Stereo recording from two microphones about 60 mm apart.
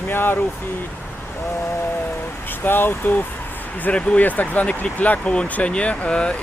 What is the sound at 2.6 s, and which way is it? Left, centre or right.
Speech, left.